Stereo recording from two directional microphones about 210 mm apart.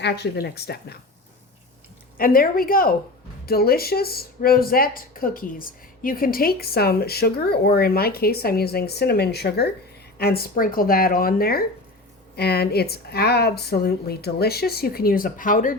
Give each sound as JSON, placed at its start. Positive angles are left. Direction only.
{"t": 0.0, "sound": "speech", "side_deg": 50}
{"t": 2.1, "sound": "speech", "side_deg": 45}